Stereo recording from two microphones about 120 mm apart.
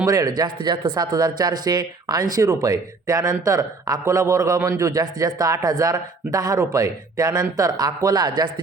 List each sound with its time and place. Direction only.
0.0 s a man's voice: 30° right (ahead or behind)